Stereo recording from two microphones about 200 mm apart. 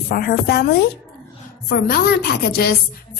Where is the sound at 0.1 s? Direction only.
50° left (ahead or behind).